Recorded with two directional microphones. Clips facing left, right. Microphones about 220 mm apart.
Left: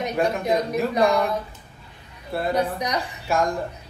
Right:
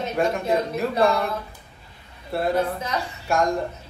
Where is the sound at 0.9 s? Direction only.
15° left (ahead or behind).